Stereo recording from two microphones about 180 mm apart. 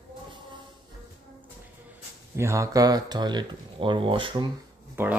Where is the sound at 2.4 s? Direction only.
15° right (ahead or behind).